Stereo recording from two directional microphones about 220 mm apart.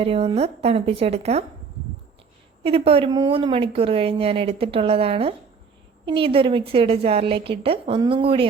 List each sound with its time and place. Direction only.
0.0 s speech: 25° right (ahead or behind)
2.6 s speech: 25° right (ahead or behind)